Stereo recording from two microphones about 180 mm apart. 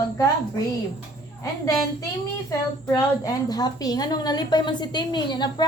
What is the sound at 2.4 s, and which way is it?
A woman's voice, 20° left (ahead or behind).